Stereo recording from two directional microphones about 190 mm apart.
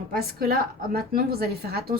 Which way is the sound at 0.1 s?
55° right (ahead or behind).